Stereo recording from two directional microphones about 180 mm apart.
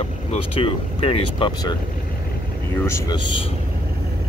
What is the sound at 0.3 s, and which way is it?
Speech, 30° left (ahead or behind).